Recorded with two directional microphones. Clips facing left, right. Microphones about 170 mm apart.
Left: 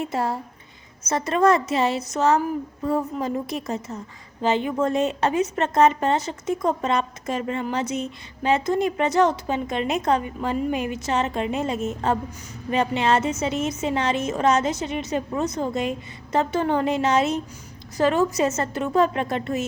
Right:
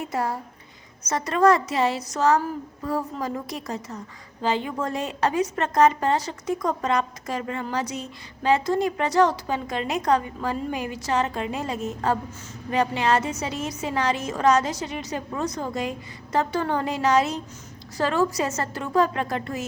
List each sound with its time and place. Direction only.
0.0 s a woman's voice: 25° left (ahead or behind)